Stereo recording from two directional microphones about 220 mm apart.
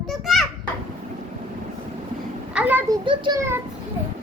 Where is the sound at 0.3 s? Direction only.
Centre (ahead or behind).